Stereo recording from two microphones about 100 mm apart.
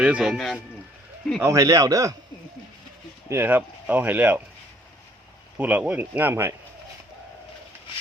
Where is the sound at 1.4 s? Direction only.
30° right (ahead or behind).